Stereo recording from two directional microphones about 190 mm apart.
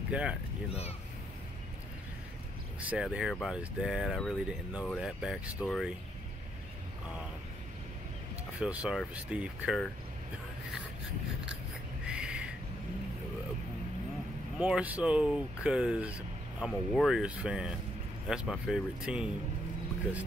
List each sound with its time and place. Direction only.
0.1 s speech: 5° right (ahead or behind)
2.9 s speech: 5° right (ahead or behind)
8.5 s speech: 5° right (ahead or behind)
12.1 s a sound: 5° right (ahead or behind)
14.6 s speech: 5° right (ahead or behind)